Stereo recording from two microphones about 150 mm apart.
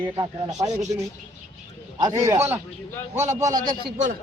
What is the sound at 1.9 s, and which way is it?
A man's voice, 25° right (ahead or behind).